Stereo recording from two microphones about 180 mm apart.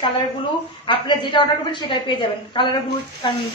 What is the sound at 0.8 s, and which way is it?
A woman's voice, 25° left (ahead or behind).